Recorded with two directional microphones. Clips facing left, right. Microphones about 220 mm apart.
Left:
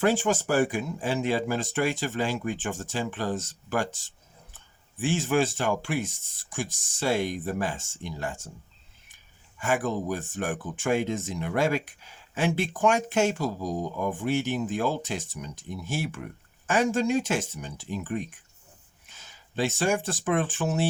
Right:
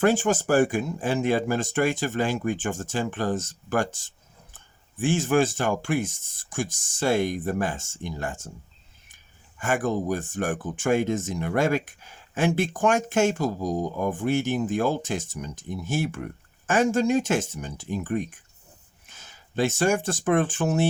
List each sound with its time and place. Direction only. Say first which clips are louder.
0.0 s speech: right 3 dB; 45° right (ahead or behind)
9.6 s speech: right 2 dB; 50° right (ahead or behind)